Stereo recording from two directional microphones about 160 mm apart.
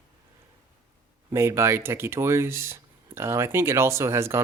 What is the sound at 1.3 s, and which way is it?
Speech, 15° right (ahead or behind).